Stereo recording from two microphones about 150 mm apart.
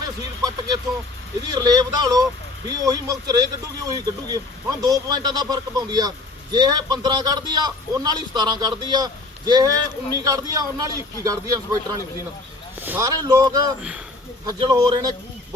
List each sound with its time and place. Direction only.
1.5 s speech: 25° right (ahead or behind)
12.8 s speech: 15° right (ahead or behind)
13.1 s speech: 25° right (ahead or behind)